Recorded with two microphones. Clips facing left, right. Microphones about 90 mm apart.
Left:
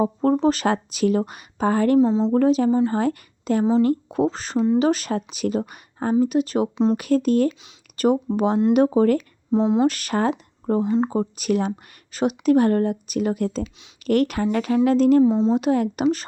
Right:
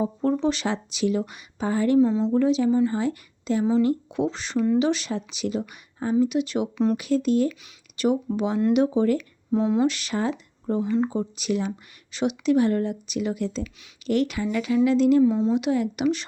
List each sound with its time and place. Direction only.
0.0 s speech: 45° left (ahead or behind)
2.0 s a woman's voice: 25° left (ahead or behind)
2.3 s speech: 50° left (ahead or behind)
2.6 s speech: 35° left (ahead or behind)
2.9 s a woman's voice: 50° left (ahead or behind)
4.5 s a woman's voice: 20° left (ahead or behind)
4.8 s speech: 45° left (ahead or behind)
9.1 s speech: 25° left (ahead or behind)
9.8 s speech: 45° left (ahead or behind)
15.2 s a woman's voice: 25° left (ahead or behind)
15.5 s speech: 45° left (ahead or behind)